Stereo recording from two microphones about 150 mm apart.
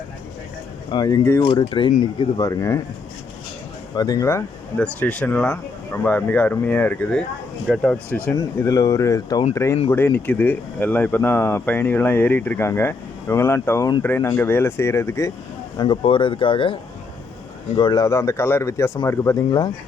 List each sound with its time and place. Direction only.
0.9 s speech: 25° left (ahead or behind)
1.5 s speech: 35° left (ahead or behind)
3.9 s speech: 25° left (ahead or behind)
4.8 s speech: 10° left (ahead or behind)
15.8 s speech: 30° left (ahead or behind)
17.7 s speech: 30° left (ahead or behind)